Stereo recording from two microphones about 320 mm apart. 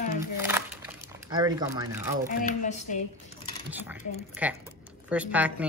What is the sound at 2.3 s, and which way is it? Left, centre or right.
Speech, left.